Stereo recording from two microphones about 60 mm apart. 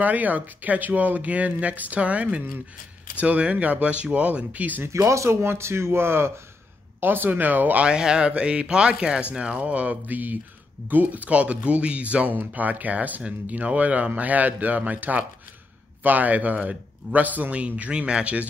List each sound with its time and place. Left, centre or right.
0.0 s a man's voice: right
4.8 s speech: right
7.8 s a man's voice: centre